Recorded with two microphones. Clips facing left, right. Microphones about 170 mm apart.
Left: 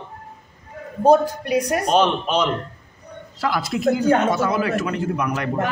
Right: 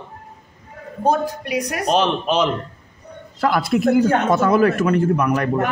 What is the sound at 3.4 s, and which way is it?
Speech, 55° right (ahead or behind).